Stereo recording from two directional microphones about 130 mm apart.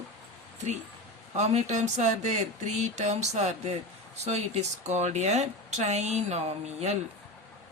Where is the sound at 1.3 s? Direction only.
60° right (ahead or behind).